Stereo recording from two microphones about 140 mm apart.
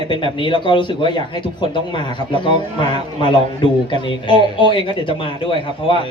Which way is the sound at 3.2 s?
35° left (ahead or behind).